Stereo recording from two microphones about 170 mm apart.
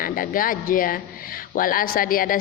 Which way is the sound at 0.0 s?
55° left (ahead or behind).